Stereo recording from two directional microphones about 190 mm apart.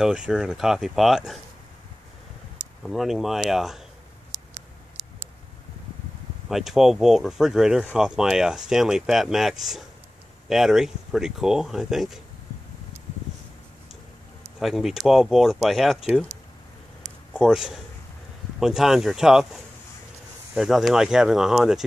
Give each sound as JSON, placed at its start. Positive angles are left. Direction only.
{"t": 0.0, "sound": "speech", "side_deg": -5}
{"t": 2.8, "sound": "speech", "side_deg": 0}
{"t": 4.3, "sound": "tick", "side_deg": -25}
{"t": 6.5, "sound": "speech", "side_deg": 0}
{"t": 14.6, "sound": "speech", "side_deg": 0}
{"t": 17.3, "sound": "a man's voice", "side_deg": -5}